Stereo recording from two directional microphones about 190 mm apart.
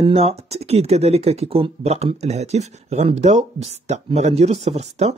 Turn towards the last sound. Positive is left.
turn(degrees=-35)  # may be behind; listen again after turning